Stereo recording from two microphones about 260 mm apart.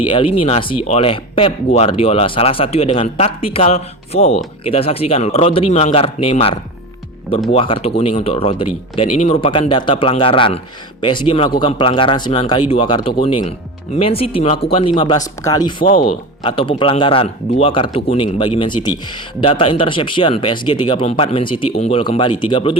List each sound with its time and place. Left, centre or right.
0.0 s speech: left
15.8 s speech: left
16.0 s speech: centre